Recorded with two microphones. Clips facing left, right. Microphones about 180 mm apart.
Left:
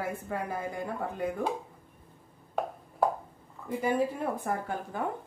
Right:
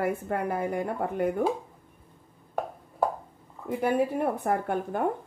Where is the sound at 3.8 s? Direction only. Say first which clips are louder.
Right 4 dB; 60° right (ahead or behind).